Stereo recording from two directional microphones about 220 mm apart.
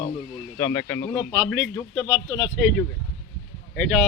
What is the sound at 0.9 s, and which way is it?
A man's voice, 10° left (ahead or behind).